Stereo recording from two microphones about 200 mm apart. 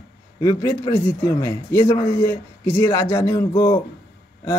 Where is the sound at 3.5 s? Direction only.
25° left (ahead or behind).